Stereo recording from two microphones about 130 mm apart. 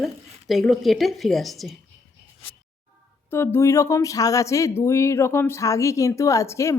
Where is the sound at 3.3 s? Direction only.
15° left (ahead or behind).